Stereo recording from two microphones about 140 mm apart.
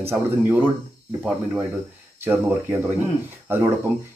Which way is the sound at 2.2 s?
15° right (ahead or behind).